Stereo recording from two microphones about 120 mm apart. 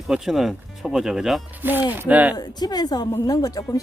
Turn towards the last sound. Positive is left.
turn(degrees=30)  # may be behind; listen again after turning